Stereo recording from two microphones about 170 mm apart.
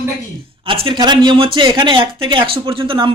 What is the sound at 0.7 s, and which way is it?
Speech, 30° right (ahead or behind).